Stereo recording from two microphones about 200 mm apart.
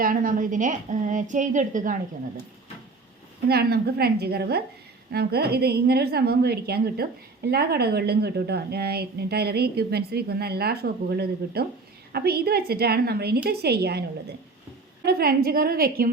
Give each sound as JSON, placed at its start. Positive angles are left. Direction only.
{"t": 0.0, "sound": "a woman's voice", "side_deg": -45}
{"t": 3.5, "sound": "a woman's voice", "side_deg": -50}
{"t": 15.0, "sound": "a woman's voice", "side_deg": -50}